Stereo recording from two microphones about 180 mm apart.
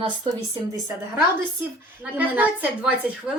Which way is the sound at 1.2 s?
10° right (ahead or behind).